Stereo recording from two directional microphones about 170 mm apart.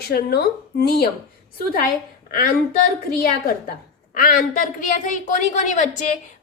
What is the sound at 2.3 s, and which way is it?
A woman's voice, 55° left (ahead or behind).